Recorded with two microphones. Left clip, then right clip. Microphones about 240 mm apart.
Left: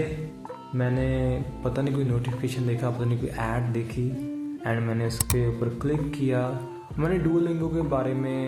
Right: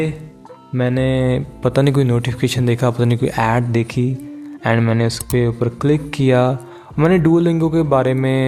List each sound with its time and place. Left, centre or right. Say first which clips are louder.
0.8 s speech: right 10 dB; right